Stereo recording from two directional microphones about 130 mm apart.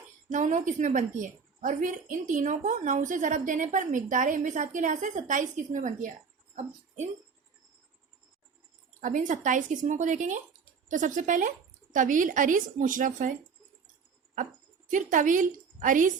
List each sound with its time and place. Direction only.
0.3 s a woman's voice: 70° right (ahead or behind)
6.6 s speech: 65° right (ahead or behind)
9.0 s a woman's voice: 80° right
14.8 s a woman's voice: 85° right